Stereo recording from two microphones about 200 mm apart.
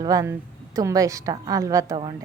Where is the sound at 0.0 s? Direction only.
15° right (ahead or behind).